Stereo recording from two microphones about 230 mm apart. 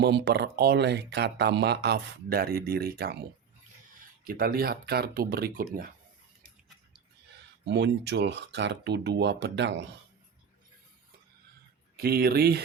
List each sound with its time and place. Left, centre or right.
0.0 s speech: right
4.2 s speech: right
7.6 s speech: right
11.9 s speech: right